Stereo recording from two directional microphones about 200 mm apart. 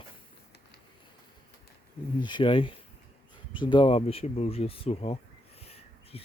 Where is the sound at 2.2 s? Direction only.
25° left (ahead or behind).